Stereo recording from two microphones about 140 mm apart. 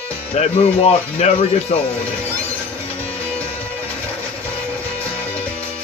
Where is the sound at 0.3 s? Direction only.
50° left (ahead or behind).